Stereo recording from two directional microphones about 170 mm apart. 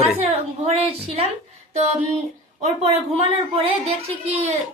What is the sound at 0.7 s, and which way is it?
Speech, 35° right (ahead or behind).